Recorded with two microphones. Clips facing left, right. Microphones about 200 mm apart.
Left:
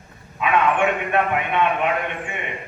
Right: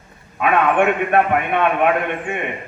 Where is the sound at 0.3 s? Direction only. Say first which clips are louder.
Right 3 dB; 50° right (ahead or behind).